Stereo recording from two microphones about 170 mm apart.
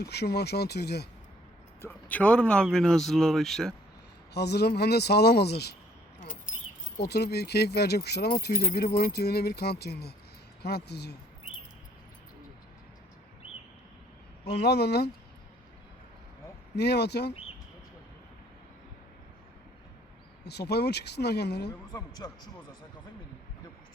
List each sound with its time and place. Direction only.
0.0 s speech: 70° left (ahead or behind)
1.8 s speech: 10° left (ahead or behind)
4.4 s speech: 70° left (ahead or behind)
6.5 s keys jangling: 45° left (ahead or behind)
7.0 s speech: 70° left (ahead or behind)
14.4 s speech: 75° left (ahead or behind)
16.7 s speech: 75° left (ahead or behind)
20.4 s speech: 75° left (ahead or behind)
21.9 s speech: 20° left (ahead or behind)